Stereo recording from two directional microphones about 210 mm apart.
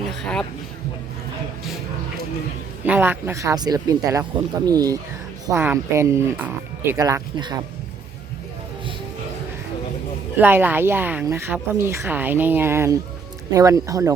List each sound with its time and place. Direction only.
0.1 s a sound: 5° left (ahead or behind)
2.8 s a woman's voice: 10° right (ahead or behind)
10.3 s a woman's voice: 10° right (ahead or behind)